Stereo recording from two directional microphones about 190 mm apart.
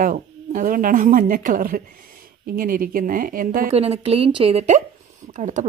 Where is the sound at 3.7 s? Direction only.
30° right (ahead or behind).